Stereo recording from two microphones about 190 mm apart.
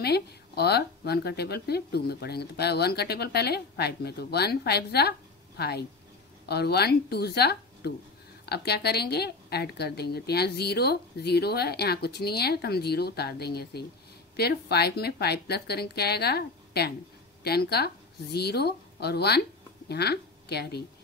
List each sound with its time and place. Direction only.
0.0 s a woman's voice: 60° left (ahead or behind)